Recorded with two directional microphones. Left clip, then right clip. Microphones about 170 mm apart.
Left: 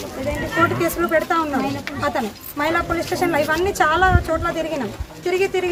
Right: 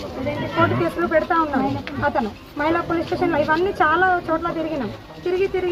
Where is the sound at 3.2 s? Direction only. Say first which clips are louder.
Even; 25° left (ahead or behind).